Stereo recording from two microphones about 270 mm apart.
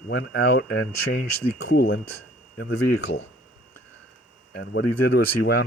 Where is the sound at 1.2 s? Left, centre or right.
Left.